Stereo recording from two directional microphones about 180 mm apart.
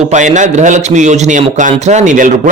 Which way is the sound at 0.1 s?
40° right (ahead or behind).